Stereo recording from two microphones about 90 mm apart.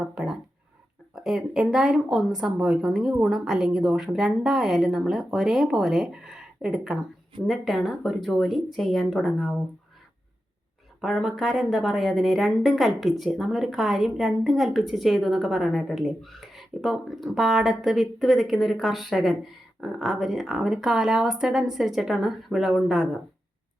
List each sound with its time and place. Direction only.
0.0 s a sound: 10° right (ahead or behind)
1.1 s a woman's voice: 5° right (ahead or behind)
11.0 s a woman's voice: 5° right (ahead or behind)